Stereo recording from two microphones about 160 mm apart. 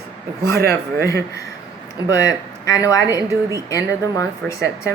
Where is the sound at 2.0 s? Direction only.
20° left (ahead or behind).